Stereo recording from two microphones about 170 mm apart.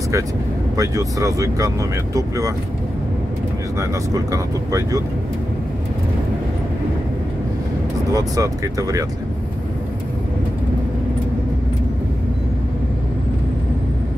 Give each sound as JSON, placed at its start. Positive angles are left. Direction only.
{"t": 0.7, "sound": "speech", "side_deg": -20}
{"t": 4.1, "sound": "speech", "side_deg": -20}
{"t": 8.1, "sound": "speech", "side_deg": -20}